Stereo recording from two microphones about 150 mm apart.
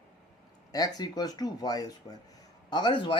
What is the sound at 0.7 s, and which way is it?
Speech, 25° left (ahead or behind).